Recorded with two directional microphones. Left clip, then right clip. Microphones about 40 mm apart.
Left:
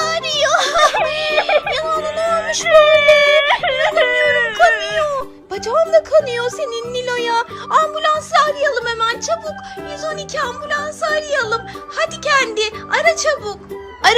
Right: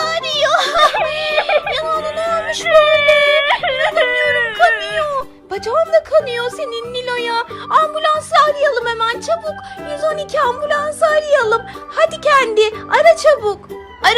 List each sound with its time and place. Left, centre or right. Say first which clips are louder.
0.0 s music: right 1 dB; left
0.9 s wail: even; centre
1.5 s music: even; centre
2.0 s a sound: even; centre
5.1 s speech: right 1 dB; left
8.3 s speech: right 4 dB; left
8.7 s a woman's voice: right 2 dB; left
9.0 s speech: even; left
9.9 s speech: right 6 dB; centre
11.1 s speech: right 3 dB; centre